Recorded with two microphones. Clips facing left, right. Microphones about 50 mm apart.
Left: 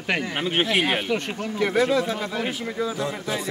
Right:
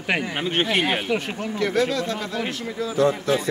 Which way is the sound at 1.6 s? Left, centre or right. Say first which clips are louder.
Left 2 dB; centre.